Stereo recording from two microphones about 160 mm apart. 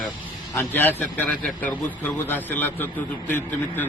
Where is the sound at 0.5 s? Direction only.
10° left (ahead or behind).